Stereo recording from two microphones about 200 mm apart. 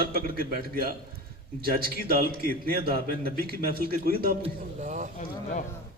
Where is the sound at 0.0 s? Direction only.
45° right (ahead or behind).